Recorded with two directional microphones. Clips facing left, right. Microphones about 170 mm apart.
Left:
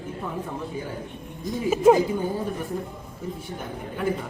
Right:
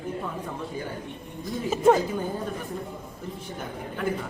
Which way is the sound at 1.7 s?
10° left (ahead or behind).